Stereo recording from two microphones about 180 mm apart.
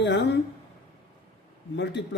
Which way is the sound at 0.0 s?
75° left (ahead or behind).